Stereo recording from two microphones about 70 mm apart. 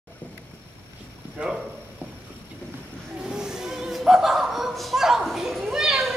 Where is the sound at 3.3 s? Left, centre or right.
Centre.